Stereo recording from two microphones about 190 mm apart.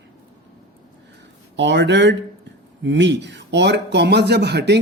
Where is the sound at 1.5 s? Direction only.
70° right (ahead or behind).